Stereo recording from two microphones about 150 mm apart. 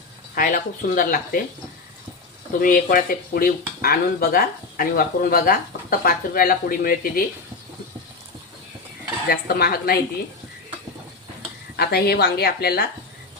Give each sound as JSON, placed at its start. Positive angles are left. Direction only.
{"t": 0.3, "sound": "speech", "side_deg": 65}
{"t": 2.6, "sound": "speech", "side_deg": 65}
{"t": 9.2, "sound": "a woman's voice", "side_deg": 90}
{"t": 11.8, "sound": "a woman's voice", "side_deg": 90}